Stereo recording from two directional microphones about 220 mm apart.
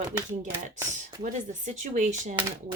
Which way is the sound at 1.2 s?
35° right (ahead or behind).